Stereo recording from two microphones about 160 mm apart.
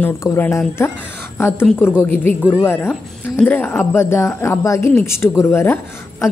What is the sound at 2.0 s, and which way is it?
A woman's voice, 10° left (ahead or behind).